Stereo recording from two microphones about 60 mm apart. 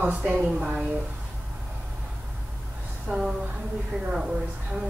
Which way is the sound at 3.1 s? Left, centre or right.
Centre.